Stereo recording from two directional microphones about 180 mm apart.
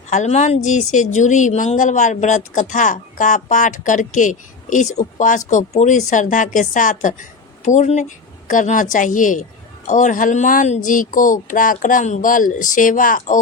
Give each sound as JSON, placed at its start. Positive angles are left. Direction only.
{"t": 0.1, "sound": "a woman's voice", "side_deg": 40}